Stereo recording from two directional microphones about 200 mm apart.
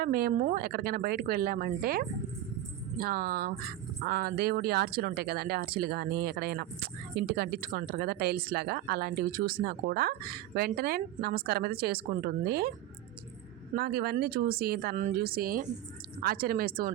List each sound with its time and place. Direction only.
0.0 s speech: 45° right (ahead or behind)
0.6 s speech: 50° right (ahead or behind)
13.7 s speech: 50° right (ahead or behind)